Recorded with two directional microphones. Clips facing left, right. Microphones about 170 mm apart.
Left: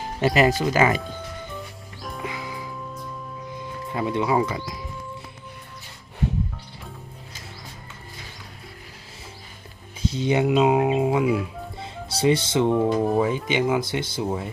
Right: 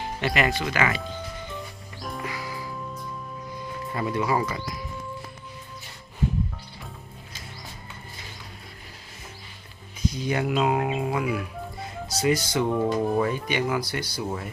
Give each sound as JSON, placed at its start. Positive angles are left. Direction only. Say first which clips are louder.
{"t": 0.0, "sound": "speech", "louder": "left 6 dB", "side_deg": 35}
{"t": 2.0, "sound": "music", "louder": "right 1 dB", "side_deg": 0}
{"t": 2.2, "sound": "music", "louder": "left 4 dB", "side_deg": 20}
{"t": 3.9, "sound": "speech", "louder": "left 3 dB", "side_deg": 20}
{"t": 10.0, "sound": "speech", "louder": "left 5 dB", "side_deg": 25}